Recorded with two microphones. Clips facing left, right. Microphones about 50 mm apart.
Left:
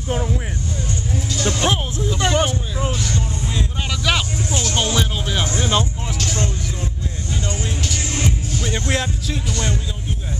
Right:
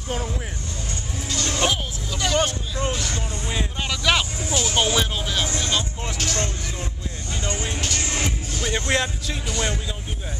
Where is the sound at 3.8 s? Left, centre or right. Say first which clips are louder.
Even; centre.